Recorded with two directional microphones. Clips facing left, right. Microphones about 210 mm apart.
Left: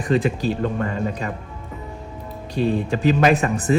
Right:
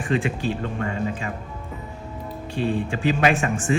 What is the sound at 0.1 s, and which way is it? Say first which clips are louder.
A man's voice: left 4 dB; 35° left (ahead or behind).